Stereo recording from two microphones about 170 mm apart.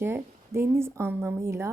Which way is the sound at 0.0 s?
15° right (ahead or behind).